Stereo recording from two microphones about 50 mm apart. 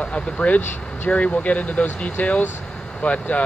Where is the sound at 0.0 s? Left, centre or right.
Left.